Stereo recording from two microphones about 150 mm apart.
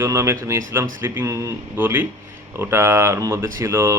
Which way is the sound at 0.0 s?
15° right (ahead or behind).